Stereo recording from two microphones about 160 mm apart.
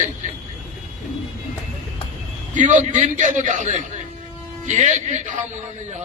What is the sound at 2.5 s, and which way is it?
A man's voice, 50° right (ahead or behind).